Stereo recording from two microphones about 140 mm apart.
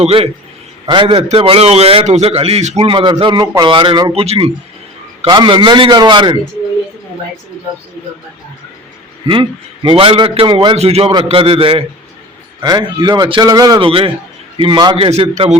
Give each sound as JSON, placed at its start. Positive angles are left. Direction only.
{"t": 0.0, "sound": "a man's voice", "side_deg": -40}
{"t": 2.9, "sound": "a man's voice", "side_deg": -35}
{"t": 4.1, "sound": "a man's voice", "side_deg": -45}
{"t": 5.3, "sound": "a man's voice", "side_deg": -35}
{"t": 9.2, "sound": "a man's voice", "side_deg": -35}
{"t": 10.8, "sound": "a man's voice", "side_deg": -45}
{"t": 12.6, "sound": "a man's voice", "side_deg": -30}